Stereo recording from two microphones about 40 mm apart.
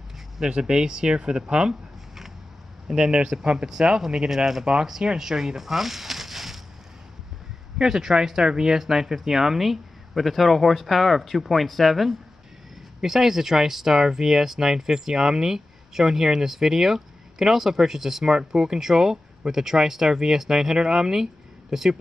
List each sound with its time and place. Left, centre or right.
0.4 s speech: right
2.9 s speech: centre
5.6 s a sound: centre
7.8 s speech: centre